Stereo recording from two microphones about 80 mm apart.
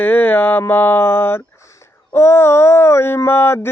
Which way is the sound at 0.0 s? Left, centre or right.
Left.